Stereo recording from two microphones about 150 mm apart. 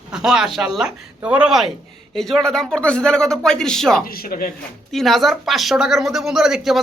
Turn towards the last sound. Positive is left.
turn(degrees=0)  # may be behind; listen again after turning